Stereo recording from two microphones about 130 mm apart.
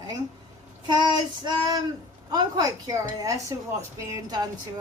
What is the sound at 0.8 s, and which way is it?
Child singing, 35° right (ahead or behind).